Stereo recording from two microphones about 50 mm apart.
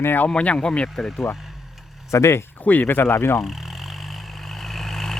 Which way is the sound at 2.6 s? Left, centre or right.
Left.